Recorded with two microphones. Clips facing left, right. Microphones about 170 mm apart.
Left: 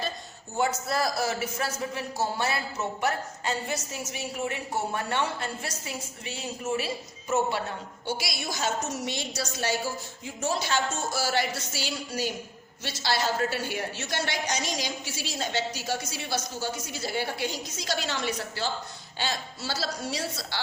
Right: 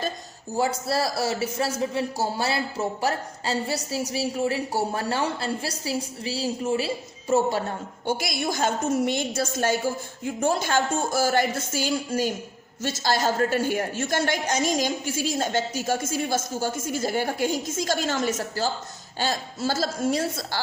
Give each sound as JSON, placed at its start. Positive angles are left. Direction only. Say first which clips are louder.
{"t": 0.5, "sound": "a man's voice", "louder": "right 3 dB", "side_deg": -35}
{"t": 8.0, "sound": "a man's voice", "louder": "right 6 dB", "side_deg": -50}